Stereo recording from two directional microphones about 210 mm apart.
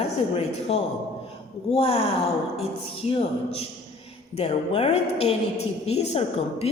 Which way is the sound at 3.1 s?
30° left (ahead or behind).